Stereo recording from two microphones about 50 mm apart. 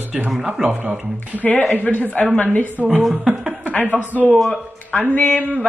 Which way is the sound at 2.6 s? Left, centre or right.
Right.